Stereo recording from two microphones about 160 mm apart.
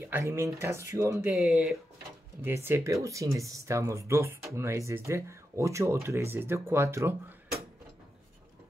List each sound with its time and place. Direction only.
0.0 s speech: 15° right (ahead or behind)
1.3 s speech: centre (ahead or behind)
2.4 s speech: 15° right (ahead or behind)